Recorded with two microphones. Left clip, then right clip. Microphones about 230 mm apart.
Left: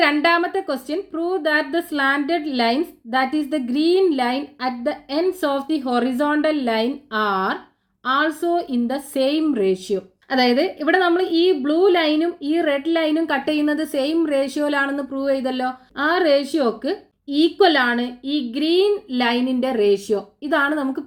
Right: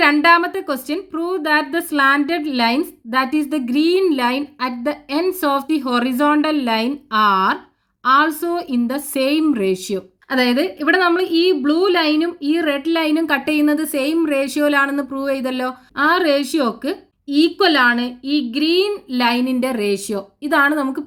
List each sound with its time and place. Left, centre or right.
0.0 s a woman's voice: right